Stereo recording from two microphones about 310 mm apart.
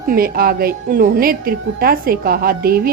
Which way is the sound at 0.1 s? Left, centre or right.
Right.